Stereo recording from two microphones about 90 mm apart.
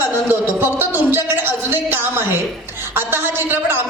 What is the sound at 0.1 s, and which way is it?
A woman's voice, 25° right (ahead or behind).